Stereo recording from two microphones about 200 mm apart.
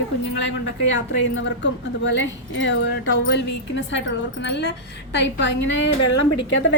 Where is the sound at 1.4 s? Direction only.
65° left (ahead or behind).